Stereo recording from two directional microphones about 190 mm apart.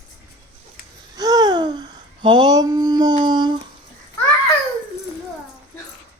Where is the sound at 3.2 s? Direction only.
25° right (ahead or behind).